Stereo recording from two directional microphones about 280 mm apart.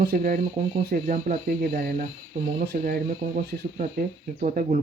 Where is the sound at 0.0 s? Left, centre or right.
Right.